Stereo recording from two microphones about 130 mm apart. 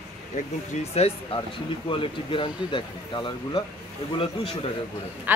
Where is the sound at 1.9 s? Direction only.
45° left (ahead or behind).